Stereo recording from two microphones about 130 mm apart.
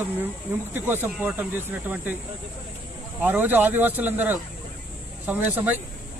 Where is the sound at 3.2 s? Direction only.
15° right (ahead or behind).